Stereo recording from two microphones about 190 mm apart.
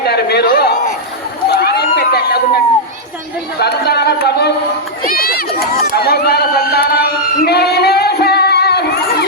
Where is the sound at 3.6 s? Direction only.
60° left (ahead or behind).